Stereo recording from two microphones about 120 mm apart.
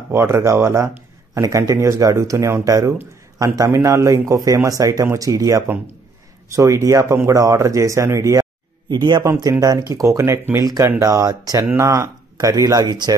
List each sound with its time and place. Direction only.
0.1 s speech: 20° right (ahead or behind)